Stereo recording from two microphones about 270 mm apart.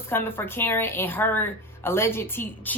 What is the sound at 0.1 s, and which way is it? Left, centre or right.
Speech, centre.